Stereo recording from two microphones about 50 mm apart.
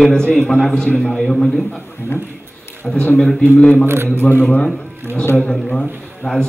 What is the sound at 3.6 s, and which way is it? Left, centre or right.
A man's voice, centre.